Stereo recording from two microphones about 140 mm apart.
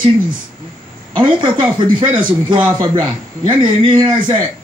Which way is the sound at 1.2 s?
35° right (ahead or behind).